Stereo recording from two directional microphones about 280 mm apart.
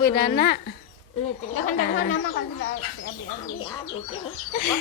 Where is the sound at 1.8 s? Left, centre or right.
Left.